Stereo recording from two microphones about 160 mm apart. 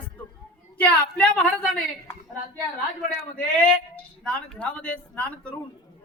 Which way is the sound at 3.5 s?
5° left (ahead or behind).